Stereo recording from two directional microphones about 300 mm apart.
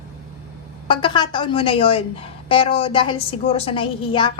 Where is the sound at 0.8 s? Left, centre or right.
Centre.